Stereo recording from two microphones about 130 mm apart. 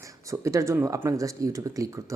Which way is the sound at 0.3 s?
25° right (ahead or behind).